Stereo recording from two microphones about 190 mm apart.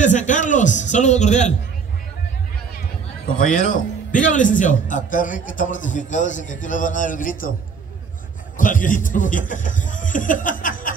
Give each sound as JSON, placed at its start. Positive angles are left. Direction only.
{"t": 0.0, "sound": "a man's voice", "side_deg": 40}
{"t": 3.3, "sound": "a man's voice", "side_deg": 40}
{"t": 8.5, "sound": "a man's voice", "side_deg": 45}